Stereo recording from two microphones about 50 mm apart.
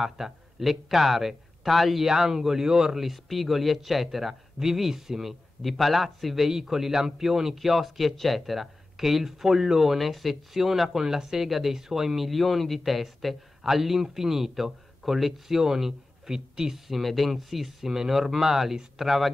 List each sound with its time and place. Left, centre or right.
0.0 s a man's voice: centre